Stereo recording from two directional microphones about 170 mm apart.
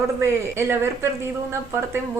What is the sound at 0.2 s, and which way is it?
Speech, 15° right (ahead or behind).